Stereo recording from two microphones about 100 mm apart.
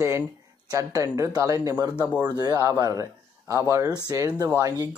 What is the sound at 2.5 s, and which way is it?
A man's voice, 30° right (ahead or behind).